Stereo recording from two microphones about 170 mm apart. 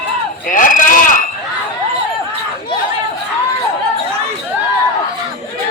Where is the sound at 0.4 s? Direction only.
50° left (ahead or behind).